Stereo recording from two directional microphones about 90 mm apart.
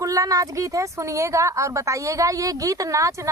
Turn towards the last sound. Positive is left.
turn(degrees=-35)  # may be behind; listen again after turning